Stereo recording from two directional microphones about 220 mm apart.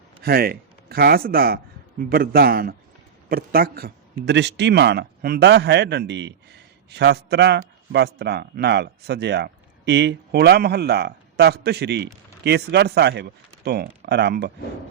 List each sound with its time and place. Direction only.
0.2 s a man's voice: 45° right (ahead or behind)